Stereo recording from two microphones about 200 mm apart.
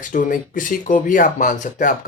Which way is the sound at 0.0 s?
40° left (ahead or behind).